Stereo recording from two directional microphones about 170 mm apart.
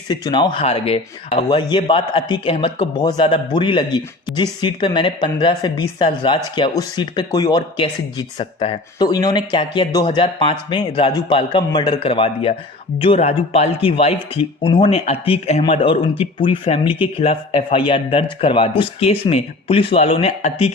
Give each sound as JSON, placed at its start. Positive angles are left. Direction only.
{"t": 0.1, "sound": "speech", "side_deg": 25}